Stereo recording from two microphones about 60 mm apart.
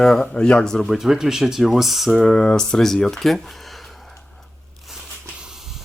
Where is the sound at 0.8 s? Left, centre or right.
Centre.